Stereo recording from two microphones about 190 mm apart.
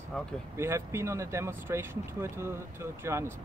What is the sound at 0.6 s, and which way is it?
Speech, 15° right (ahead or behind).